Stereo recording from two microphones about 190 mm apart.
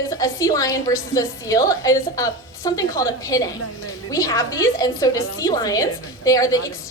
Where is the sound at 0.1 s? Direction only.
15° left (ahead or behind).